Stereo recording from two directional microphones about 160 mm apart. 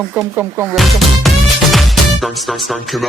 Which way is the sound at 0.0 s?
Centre (ahead or behind).